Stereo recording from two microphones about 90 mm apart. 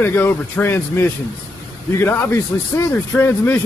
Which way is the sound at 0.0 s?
25° left (ahead or behind).